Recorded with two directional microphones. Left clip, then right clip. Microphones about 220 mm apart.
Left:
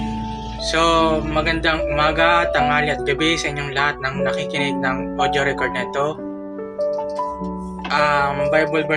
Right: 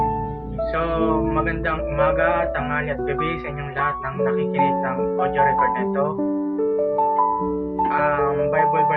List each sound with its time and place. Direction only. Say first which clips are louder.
0.7 s music: left 6 dB; 65° left (ahead or behind)
4.5 s music: right 1 dB; 65° left (ahead or behind)
7.9 s music: left 4 dB; 65° left (ahead or behind)